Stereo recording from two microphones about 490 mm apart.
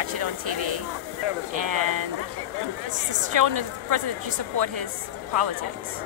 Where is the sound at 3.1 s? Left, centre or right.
Right.